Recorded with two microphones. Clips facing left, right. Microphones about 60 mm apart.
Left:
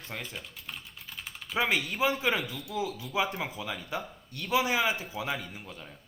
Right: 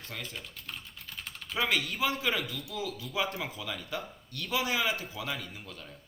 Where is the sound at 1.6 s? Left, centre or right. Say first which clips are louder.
Left 2 dB; left.